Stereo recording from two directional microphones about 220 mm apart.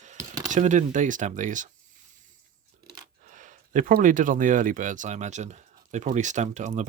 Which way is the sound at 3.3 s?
35° right (ahead or behind).